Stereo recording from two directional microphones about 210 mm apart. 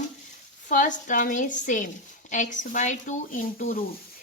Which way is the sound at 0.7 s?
40° left (ahead or behind).